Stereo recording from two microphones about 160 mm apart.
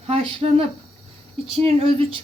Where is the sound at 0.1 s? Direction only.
35° right (ahead or behind).